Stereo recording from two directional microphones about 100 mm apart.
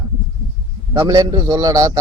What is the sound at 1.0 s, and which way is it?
Speech, 45° right (ahead or behind).